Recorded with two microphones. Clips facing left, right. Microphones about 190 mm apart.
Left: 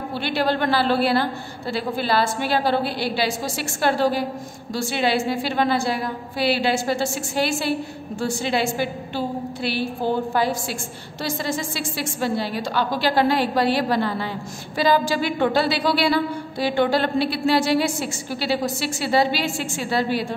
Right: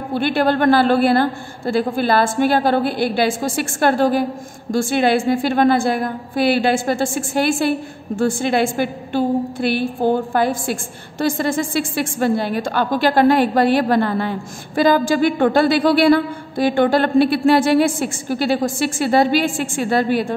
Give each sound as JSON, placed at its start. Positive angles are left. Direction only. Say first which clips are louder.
{"t": 0.1, "sound": "a woman's voice", "louder": "right 6 dB", "side_deg": -50}